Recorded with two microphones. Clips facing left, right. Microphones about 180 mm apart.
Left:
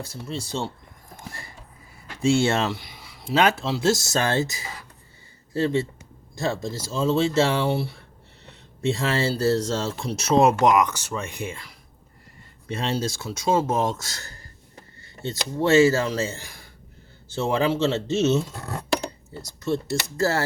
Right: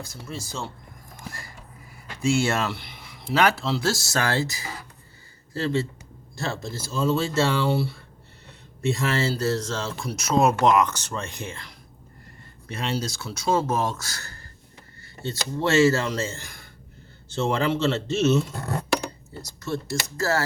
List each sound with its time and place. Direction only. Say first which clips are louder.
0.0 s speech: left 4 dB; 30° left (ahead or behind)
2.2 s speech: left 3 dB; 30° left (ahead or behind)
2.6 s a sound: left 2 dB; 15° left (ahead or behind)
3.3 s speech: left 1 dB; 25° left (ahead or behind)
8.9 s speech: left 1 dB; 30° left (ahead or behind); by 11.7 s 10° left (ahead or behind)
12.6 s speech: left 2 dB; 25° left (ahead or behind)
19.7 s speech: left 3 dB; 30° left (ahead or behind)